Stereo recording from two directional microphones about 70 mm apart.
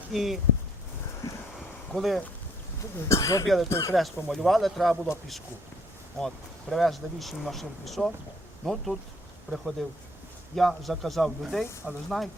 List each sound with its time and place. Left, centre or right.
0.1 s speech: centre
1.9 s speech: centre
3.1 s speech: left
3.4 s speech: centre
3.7 s speech: left
3.9 s speech: centre
6.1 s speech: centre